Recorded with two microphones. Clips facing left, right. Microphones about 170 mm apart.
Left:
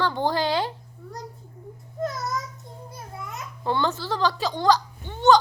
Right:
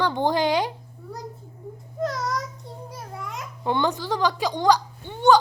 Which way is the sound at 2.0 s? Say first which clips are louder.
Right 2 dB; 90° right.